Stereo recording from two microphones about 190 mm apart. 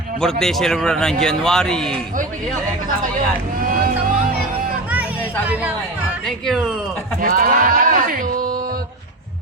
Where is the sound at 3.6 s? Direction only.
45° right (ahead or behind).